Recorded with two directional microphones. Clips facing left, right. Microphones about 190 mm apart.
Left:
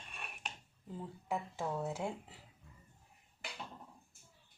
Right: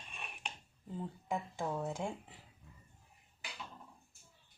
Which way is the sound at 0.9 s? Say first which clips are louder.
Right 1 dB; 5° left (ahead or behind).